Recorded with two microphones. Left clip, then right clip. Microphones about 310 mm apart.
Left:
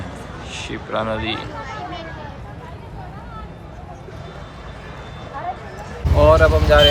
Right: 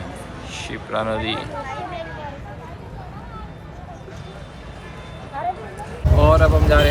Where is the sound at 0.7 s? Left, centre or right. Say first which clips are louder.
Even; centre.